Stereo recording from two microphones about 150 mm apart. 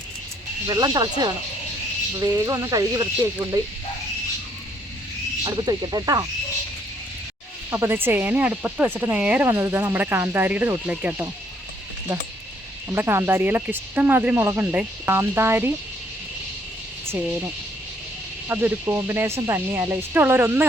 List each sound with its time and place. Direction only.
0.7 s speech: 25° right (ahead or behind)
5.4 s speech: 30° right (ahead or behind)
7.7 s speech: 15° right (ahead or behind)
12.9 s speech: 15° right (ahead or behind)
17.2 s speech: 15° right (ahead or behind)